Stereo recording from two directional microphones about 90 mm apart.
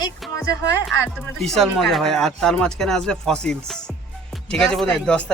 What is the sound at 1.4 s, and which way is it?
Speech, centre (ahead or behind).